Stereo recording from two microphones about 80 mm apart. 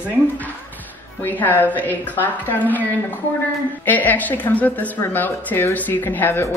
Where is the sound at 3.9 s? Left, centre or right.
Left.